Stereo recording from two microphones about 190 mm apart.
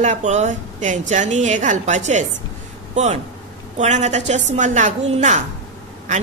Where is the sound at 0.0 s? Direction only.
40° right (ahead or behind).